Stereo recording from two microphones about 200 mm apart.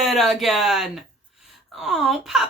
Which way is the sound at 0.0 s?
Centre (ahead or behind).